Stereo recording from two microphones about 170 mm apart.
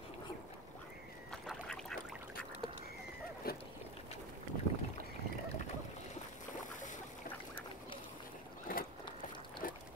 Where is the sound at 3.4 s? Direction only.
60° left (ahead or behind).